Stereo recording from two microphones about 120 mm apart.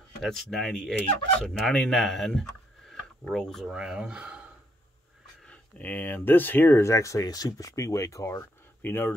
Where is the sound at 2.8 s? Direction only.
5° left (ahead or behind).